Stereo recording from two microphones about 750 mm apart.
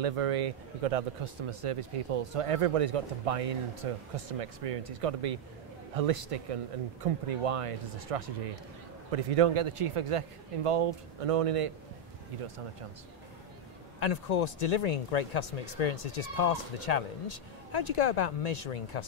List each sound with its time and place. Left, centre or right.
0.0 s speech: right
13.9 s speech: left